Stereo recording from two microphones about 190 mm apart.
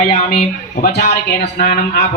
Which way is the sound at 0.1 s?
35° left (ahead or behind).